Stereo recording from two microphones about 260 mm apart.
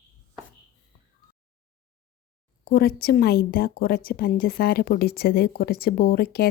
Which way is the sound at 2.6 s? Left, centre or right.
Left.